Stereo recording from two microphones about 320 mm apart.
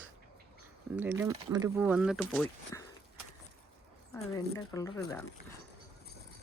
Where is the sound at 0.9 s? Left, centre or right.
Centre.